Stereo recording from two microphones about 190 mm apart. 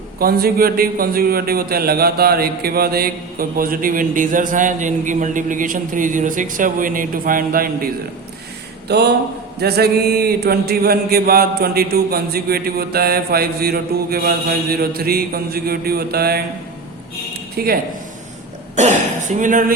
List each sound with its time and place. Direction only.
0.2 s a man's voice: 55° right (ahead or behind)
8.9 s a man's voice: 60° right (ahead or behind)
17.6 s speech: 55° right (ahead or behind)
18.8 s speech: 40° right (ahead or behind)